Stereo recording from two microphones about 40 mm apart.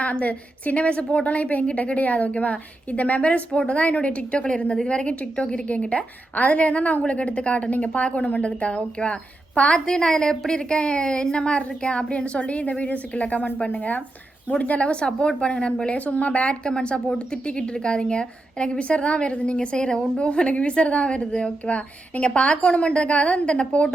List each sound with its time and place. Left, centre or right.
0.0 s a woman's voice: left
15.0 s a woman's voice: left
19.5 s a woman's voice: centre